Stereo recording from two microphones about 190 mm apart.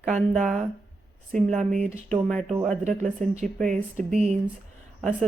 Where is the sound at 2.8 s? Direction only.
40° right (ahead or behind).